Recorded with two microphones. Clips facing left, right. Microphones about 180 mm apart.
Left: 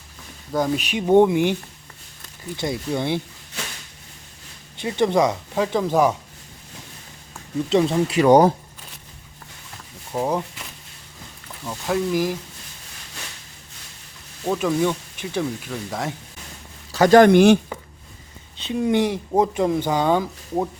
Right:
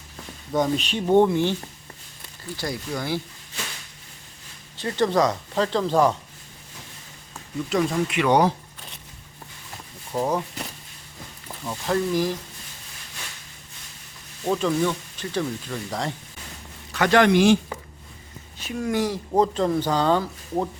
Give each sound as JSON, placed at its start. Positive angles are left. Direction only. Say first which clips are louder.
{"t": 0.5, "sound": "speech", "louder": "left 1 dB", "side_deg": 5}
{"t": 2.6, "sound": "speech", "louder": "left 5 dB", "side_deg": 25}
{"t": 4.8, "sound": "speech", "louder": "left 2 dB", "side_deg": 15}
{"t": 7.7, "sound": "speech", "louder": "left 4 dB", "side_deg": 30}
{"t": 10.1, "sound": "speech", "louder": "left 1 dB", "side_deg": 10}
{"t": 11.6, "sound": "speech", "louder": "left 1 dB", "side_deg": 5}
{"t": 14.4, "sound": "speech", "louder": "left 2 dB", "side_deg": 10}
{"t": 16.9, "sound": "a man's voice", "louder": "left 6 dB", "side_deg": 40}
{"t": 18.5, "sound": "speech", "louder": "left 5 dB", "side_deg": 25}
{"t": 19.3, "sound": "speech", "louder": "even", "side_deg": 10}